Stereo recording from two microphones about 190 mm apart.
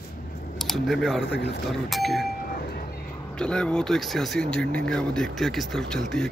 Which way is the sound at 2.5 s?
50° left (ahead or behind).